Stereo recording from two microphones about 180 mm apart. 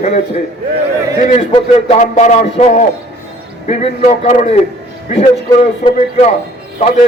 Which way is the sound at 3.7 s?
35° left (ahead or behind).